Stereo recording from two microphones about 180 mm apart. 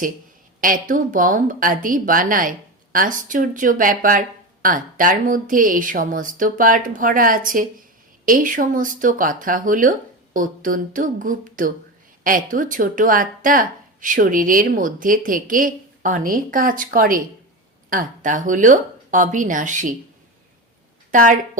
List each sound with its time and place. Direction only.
0.6 s a woman's voice: 50° right (ahead or behind)
21.1 s a woman's voice: 45° right (ahead or behind)